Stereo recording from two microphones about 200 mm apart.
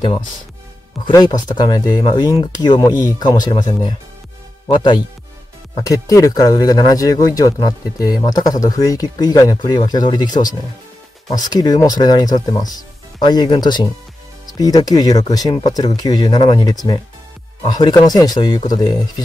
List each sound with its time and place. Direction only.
1.0 s speech: 20° left (ahead or behind)